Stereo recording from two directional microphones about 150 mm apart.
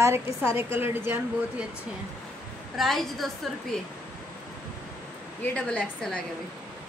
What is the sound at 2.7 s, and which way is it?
A woman's voice, centre (ahead or behind).